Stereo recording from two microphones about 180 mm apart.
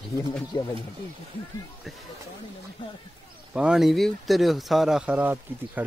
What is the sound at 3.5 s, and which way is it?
Speech, 5° right (ahead or behind).